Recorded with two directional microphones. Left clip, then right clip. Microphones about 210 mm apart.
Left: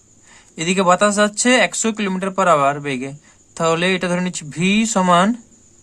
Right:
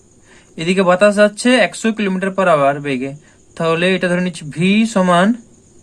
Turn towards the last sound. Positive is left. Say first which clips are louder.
# right 1 dB
turn(degrees=20)  # may be behind; listen again after turning